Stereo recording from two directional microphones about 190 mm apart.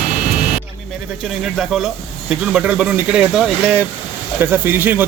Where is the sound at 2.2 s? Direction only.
5° right (ahead or behind).